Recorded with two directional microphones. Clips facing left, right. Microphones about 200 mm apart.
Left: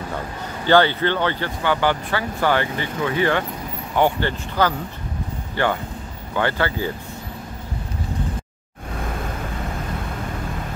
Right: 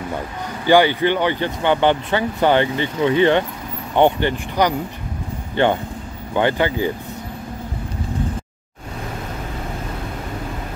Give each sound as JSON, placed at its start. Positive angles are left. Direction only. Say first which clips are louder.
{"t": 0.7, "sound": "speech", "louder": "right 2 dB", "side_deg": -15}